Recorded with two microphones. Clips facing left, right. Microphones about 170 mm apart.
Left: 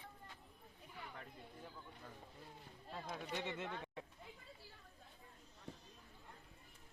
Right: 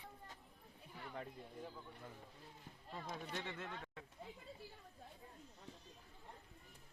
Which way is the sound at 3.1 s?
15° left (ahead or behind).